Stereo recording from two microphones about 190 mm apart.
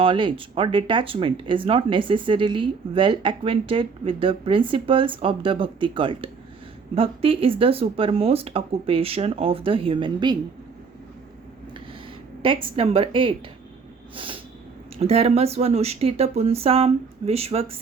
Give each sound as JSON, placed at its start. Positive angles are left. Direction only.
{"t": 0.0, "sound": "speech", "side_deg": -25}
{"t": 12.4, "sound": "speech", "side_deg": -30}